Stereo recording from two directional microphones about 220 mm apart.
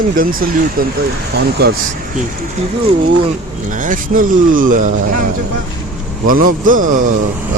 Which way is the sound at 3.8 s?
35° right (ahead or behind).